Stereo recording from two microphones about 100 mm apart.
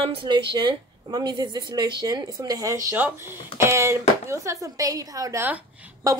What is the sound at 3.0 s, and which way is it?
A woman's voice, 20° right (ahead or behind).